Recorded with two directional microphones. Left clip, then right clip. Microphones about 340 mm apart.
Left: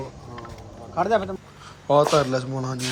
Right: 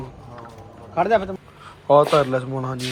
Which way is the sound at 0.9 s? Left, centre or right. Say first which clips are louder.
Right 3 dB; right.